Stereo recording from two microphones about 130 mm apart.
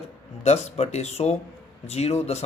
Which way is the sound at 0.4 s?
55° left (ahead or behind).